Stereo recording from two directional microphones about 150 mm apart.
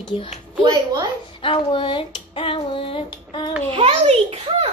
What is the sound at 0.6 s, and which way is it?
Speech, 30° right (ahead or behind).